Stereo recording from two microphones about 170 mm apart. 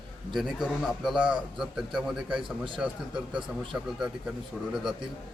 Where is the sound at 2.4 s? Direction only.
30° right (ahead or behind).